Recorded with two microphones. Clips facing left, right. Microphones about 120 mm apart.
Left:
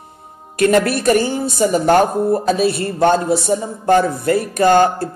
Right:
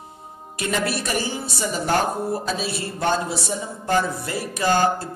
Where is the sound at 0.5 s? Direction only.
60° left (ahead or behind).